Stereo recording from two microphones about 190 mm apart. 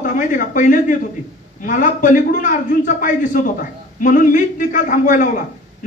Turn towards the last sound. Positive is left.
turn(degrees=45)  # may be behind; listen again after turning